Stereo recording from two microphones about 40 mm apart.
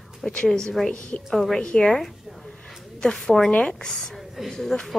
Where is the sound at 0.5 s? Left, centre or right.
Centre.